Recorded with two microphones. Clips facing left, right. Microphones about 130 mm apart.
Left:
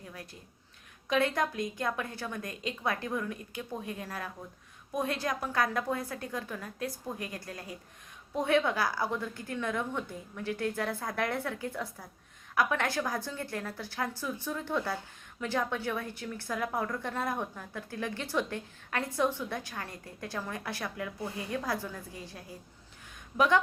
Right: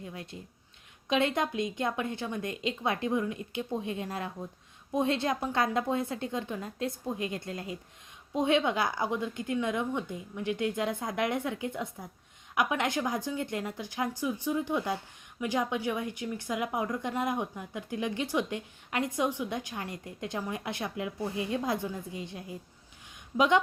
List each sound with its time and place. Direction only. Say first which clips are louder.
0.0 s a woman's voice: right 5 dB; 25° right (ahead or behind)